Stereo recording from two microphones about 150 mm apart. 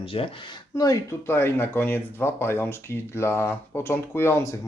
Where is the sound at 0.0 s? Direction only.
35° left (ahead or behind).